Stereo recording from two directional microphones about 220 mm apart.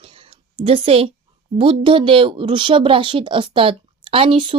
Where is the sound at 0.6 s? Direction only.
25° right (ahead or behind).